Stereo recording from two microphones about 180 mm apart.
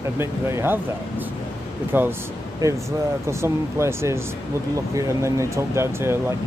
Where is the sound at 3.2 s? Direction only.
15° right (ahead or behind).